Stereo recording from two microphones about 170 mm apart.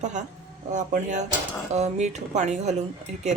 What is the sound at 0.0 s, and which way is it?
Speech, 45° right (ahead or behind).